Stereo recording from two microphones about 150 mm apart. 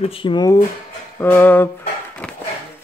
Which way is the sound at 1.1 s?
15° left (ahead or behind).